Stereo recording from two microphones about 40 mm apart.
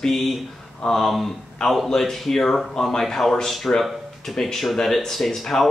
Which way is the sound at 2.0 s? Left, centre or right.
Centre.